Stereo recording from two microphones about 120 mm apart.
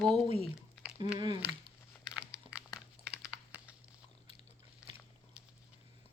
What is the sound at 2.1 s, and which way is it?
Crumpling, 10° right (ahead or behind).